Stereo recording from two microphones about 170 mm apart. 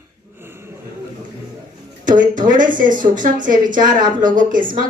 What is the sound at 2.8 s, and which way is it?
Speech, 50° right (ahead or behind).